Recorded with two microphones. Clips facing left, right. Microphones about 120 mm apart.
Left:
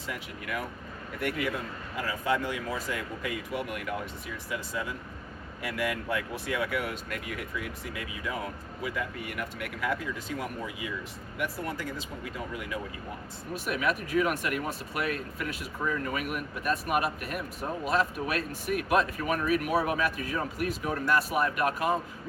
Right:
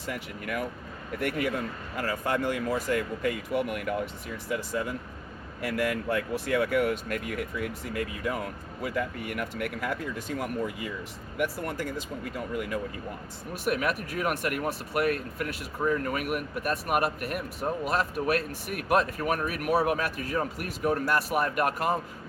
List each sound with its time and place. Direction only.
0.1 s speech: 50° right (ahead or behind)